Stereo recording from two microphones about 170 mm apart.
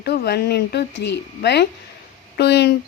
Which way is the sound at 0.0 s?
70° left (ahead or behind).